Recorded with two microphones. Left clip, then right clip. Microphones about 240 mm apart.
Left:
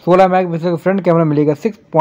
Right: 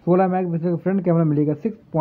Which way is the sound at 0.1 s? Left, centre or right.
Centre.